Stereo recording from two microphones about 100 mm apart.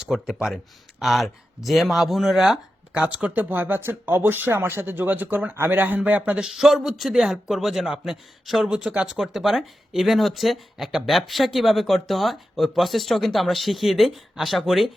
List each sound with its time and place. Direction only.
0.0 s a man's voice: 5° right (ahead or behind)
6.5 s a man's voice: 5° right (ahead or behind)